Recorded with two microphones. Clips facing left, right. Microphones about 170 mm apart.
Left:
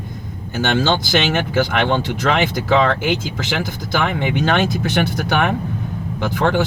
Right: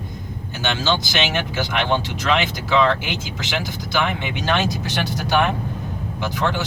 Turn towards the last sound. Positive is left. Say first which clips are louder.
# left 5 dB
turn(degrees=50)  # may be behind; listen again after turning